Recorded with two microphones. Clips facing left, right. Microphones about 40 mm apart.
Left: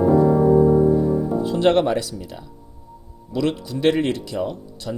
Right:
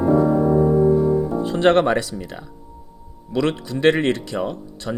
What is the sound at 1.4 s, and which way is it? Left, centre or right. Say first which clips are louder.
Speech: right 2 dB; right.